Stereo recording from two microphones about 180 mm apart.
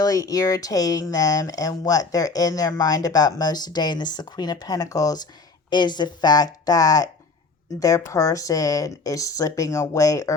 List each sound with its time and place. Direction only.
0.0 s speech: 20° left (ahead or behind)